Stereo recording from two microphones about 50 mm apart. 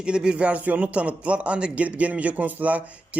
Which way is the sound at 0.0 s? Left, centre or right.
Centre.